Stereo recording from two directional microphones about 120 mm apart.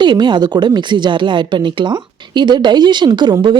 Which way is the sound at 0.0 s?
40° right (ahead or behind).